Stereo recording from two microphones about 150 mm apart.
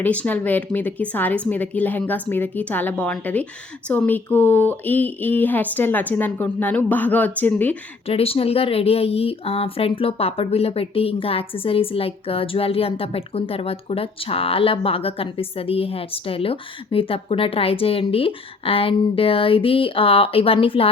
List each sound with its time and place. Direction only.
0.0 s speech: 10° left (ahead or behind)
8.0 s speech: 40° left (ahead or behind)